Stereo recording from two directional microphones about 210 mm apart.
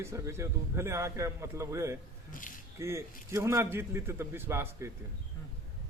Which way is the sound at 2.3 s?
40° left (ahead or behind).